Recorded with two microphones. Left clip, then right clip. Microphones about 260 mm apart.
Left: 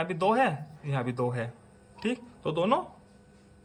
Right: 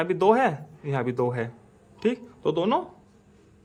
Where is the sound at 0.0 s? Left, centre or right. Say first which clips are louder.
Right 5 dB; centre.